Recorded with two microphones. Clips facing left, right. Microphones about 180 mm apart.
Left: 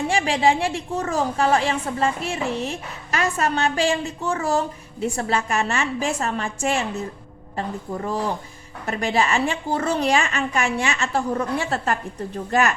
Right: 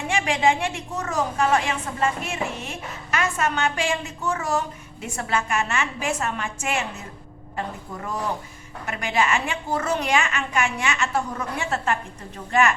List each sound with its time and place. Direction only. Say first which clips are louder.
0.1 s a woman's voice: even; 35° left (ahead or behind)
8.9 s a woman's voice: left 2 dB; 35° left (ahead or behind)